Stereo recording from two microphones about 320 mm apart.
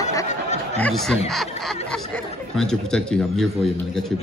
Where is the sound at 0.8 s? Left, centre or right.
Centre.